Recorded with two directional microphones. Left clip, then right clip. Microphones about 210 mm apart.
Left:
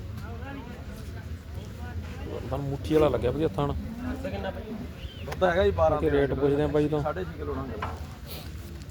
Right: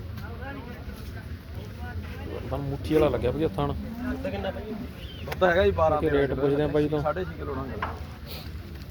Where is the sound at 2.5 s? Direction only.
5° left (ahead or behind).